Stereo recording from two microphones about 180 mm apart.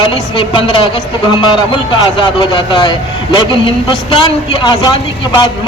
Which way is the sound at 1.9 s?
25° left (ahead or behind).